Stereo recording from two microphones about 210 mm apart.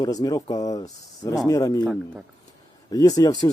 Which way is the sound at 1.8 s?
Centre (ahead or behind).